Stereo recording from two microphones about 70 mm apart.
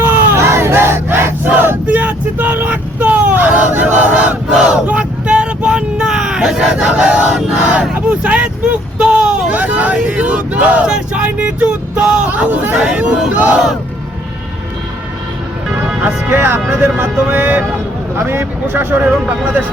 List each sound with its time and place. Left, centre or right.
0.0 s battle cry: right; by 7.3 s centre
7.6 s a sound: centre
13.3 s crowd: right
16.0 s music: centre
16.4 s speech: right
17.2 s speech: right
18.2 s speech: right